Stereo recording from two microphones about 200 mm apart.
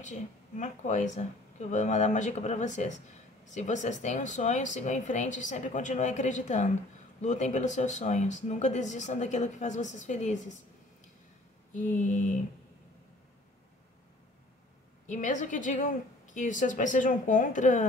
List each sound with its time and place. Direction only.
0.0 s speech: 35° left (ahead or behind)
11.7 s speech: 40° left (ahead or behind)
15.0 s speech: 40° left (ahead or behind)